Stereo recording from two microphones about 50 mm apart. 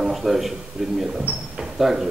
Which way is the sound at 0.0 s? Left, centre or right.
Centre.